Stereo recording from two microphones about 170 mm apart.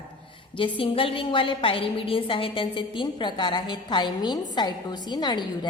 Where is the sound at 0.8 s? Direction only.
30° left (ahead or behind).